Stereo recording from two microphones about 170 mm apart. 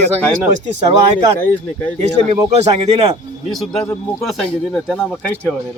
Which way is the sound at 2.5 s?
40° right (ahead or behind).